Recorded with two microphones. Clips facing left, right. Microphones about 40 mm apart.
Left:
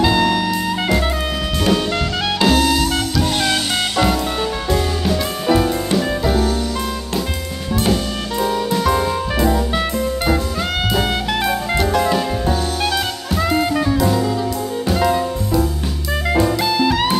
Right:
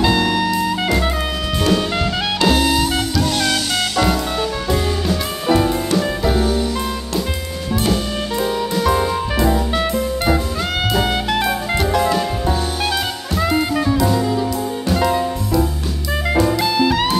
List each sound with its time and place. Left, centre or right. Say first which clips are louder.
0.0 s music: left 1 dB; centre
3.3 s music: even; centre
5.0 s music: left 1 dB; centre
8.4 s music: left 2 dB; centre
10.9 s drum kit: right 2 dB; centre
14.9 s music: even; centre
16.1 s jazz: even; centre